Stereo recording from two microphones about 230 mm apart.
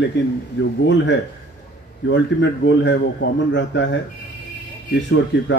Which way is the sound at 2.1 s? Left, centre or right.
Left.